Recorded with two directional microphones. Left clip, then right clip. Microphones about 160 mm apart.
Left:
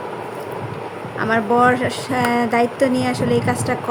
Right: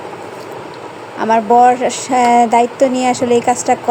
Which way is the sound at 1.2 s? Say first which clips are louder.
Right 6 dB; 20° right (ahead or behind).